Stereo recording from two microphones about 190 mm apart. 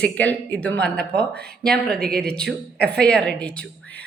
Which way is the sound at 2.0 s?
55° right (ahead or behind).